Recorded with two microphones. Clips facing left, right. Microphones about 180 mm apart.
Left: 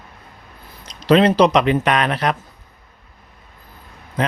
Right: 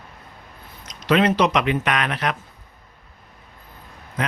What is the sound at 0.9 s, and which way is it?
Speech, 30° left (ahead or behind).